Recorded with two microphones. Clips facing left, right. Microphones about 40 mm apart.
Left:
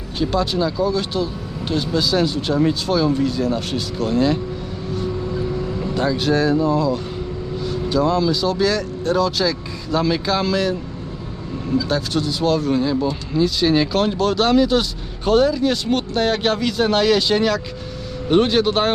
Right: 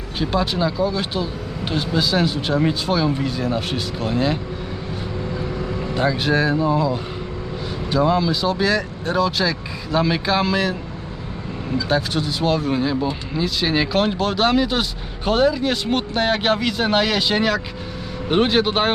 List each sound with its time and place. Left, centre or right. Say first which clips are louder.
0.2 s speech: left 1 dB; centre
5.8 s speech: even; centre
11.8 s speech: right 2 dB; centre